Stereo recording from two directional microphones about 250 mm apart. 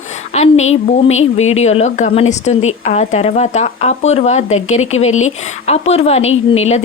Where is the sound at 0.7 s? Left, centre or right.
Left.